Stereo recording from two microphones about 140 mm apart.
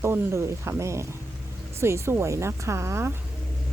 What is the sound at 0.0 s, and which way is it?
Speech, 20° right (ahead or behind).